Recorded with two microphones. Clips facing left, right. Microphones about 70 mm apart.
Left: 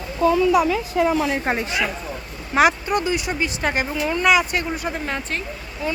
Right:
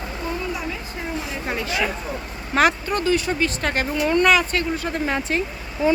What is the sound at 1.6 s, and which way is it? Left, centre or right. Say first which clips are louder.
Speech: left 1 dB; left.